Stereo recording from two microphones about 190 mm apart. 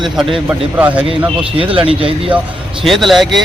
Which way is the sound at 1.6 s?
30° right (ahead or behind).